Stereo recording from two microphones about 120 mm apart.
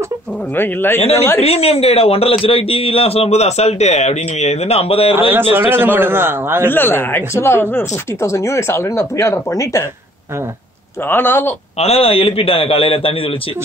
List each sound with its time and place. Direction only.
0.6 s speech: 15° left (ahead or behind)
1.4 s a man's voice: 55° left (ahead or behind)
5.3 s a man's voice: 15° right (ahead or behind)
6.7 s speech: 15° left (ahead or behind)
11.1 s speech: 20° left (ahead or behind)
11.8 s a man's voice: 55° left (ahead or behind)